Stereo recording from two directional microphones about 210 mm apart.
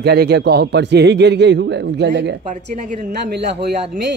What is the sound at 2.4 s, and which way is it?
Speech, 35° right (ahead or behind).